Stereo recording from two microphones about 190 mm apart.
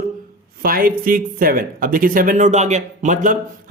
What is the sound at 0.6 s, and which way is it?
Speech, 50° right (ahead or behind).